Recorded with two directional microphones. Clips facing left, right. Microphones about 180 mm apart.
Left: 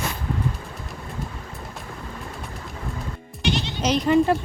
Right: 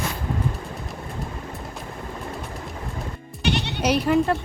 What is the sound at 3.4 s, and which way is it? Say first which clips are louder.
Bleat: even; 65° right (ahead or behind).